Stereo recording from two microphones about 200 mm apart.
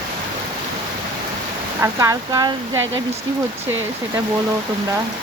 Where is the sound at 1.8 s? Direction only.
15° right (ahead or behind).